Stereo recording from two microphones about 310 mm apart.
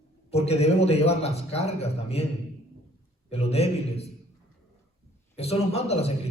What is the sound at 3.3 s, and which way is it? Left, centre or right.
Speech, centre.